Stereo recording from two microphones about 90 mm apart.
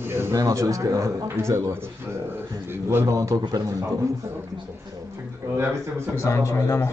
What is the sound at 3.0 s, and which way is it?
Speech, 40° right (ahead or behind).